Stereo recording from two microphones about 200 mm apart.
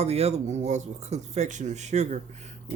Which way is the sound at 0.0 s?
30° right (ahead or behind).